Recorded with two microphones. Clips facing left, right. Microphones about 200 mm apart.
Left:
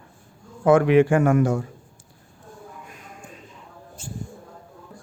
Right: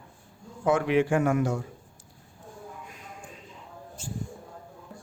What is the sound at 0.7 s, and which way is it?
Speech, 55° left (ahead or behind).